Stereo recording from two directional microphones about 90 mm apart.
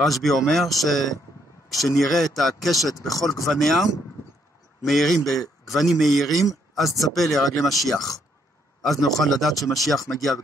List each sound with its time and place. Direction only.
0.0 s a man's voice: centre (ahead or behind)
2.9 s speech: 40° left (ahead or behind)
3.4 s a man's voice: centre (ahead or behind)